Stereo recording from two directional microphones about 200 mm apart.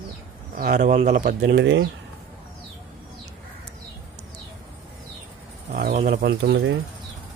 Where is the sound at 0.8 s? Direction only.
40° right (ahead or behind); by 1.9 s 60° right (ahead or behind).